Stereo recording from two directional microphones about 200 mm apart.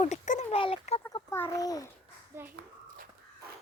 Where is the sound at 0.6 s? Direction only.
30° left (ahead or behind).